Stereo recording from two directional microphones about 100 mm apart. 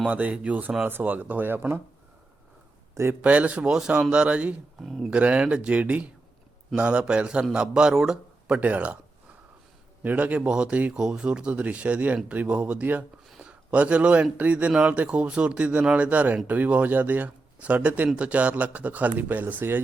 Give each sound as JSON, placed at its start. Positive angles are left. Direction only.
{"t": 0.0, "sound": "speech", "side_deg": -15}
{"t": 2.9, "sound": "a man's voice", "side_deg": -25}
{"t": 3.2, "sound": "speech", "side_deg": -15}
{"t": 10.0, "sound": "speech", "side_deg": -15}